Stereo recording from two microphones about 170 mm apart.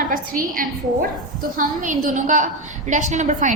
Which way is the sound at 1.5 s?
50° right (ahead or behind).